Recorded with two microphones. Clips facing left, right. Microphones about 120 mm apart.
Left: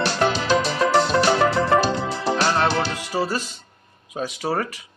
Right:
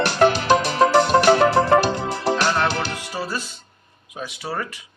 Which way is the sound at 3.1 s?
40° left (ahead or behind).